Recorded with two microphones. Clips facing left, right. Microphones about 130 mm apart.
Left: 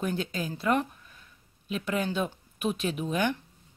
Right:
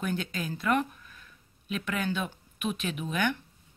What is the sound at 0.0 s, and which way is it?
Speech, 30° left (ahead or behind).